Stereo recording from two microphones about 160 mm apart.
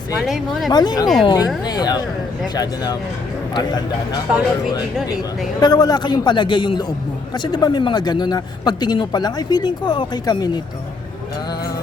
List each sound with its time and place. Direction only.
0.2 s speech: centre (ahead or behind)
0.7 s speech: 25° left (ahead or behind)
5.5 s speech: 25° left (ahead or behind)